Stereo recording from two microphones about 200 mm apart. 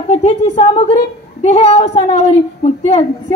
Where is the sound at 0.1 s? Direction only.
35° left (ahead or behind).